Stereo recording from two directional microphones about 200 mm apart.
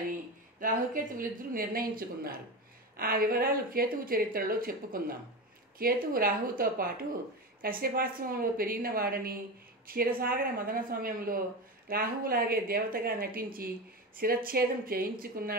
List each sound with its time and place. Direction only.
0.6 s a woman's voice: 45° right (ahead or behind)